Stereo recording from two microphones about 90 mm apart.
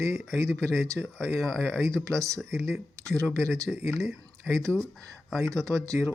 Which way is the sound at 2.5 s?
30° right (ahead or behind).